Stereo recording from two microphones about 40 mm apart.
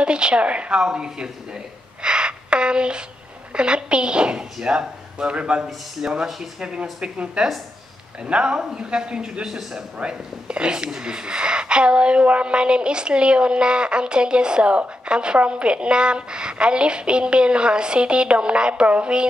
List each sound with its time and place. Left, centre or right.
0.0 s speech: right
9.9 s speech: right